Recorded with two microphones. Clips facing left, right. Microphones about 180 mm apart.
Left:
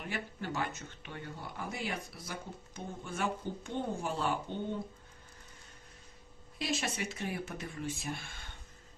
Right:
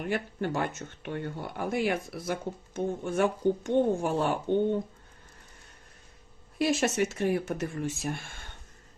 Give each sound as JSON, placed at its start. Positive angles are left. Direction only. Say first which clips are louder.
{"t": 0.0, "sound": "speech", "louder": "right 9 dB", "side_deg": -50}
{"t": 6.6, "sound": "speech", "louder": "right 10 dB", "side_deg": -60}